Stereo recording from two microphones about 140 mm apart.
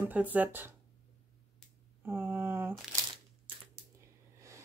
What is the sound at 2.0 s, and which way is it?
Mantra, 15° right (ahead or behind).